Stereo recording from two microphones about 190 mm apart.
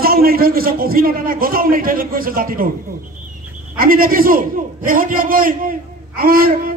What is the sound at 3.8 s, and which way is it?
A man's voice, 50° right (ahead or behind).